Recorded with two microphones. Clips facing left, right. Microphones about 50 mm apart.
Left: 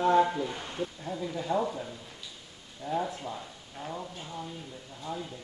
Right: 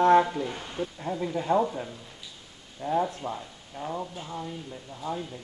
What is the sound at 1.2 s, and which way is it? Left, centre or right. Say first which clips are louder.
Speech: right 5 dB; right.